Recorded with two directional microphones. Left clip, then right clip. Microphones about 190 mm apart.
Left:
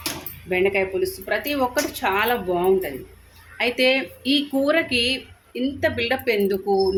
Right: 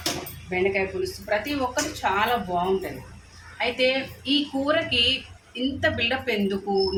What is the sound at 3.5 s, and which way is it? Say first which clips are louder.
Speech: left 4 dB; 45° left (ahead or behind).